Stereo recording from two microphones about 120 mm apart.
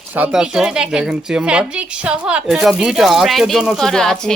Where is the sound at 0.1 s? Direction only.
10° right (ahead or behind).